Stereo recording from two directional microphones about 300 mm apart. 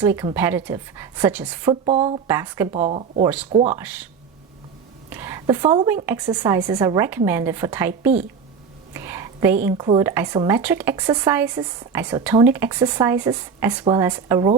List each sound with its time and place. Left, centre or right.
0.0 s speech: centre
2.7 s speech: right
5.0 s speech: centre
8.9 s whispering: centre
9.6 s speech: centre